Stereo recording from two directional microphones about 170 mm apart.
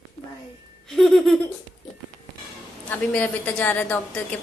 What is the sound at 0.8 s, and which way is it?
Speech, centre (ahead or behind).